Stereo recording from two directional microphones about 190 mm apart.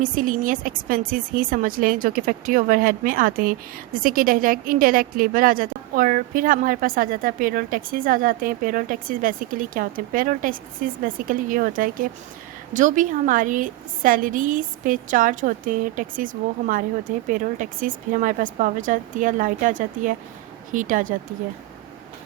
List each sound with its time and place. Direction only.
0.0 s a woman's voice: 45° right (ahead or behind)